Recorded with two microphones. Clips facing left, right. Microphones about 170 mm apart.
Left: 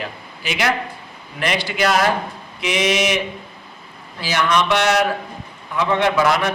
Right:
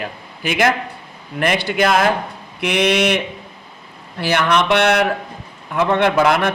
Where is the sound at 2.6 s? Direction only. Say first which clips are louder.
Right 3 dB; 60° right (ahead or behind).